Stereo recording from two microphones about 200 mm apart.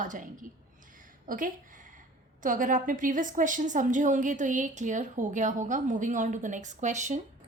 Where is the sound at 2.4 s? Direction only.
40° right (ahead or behind).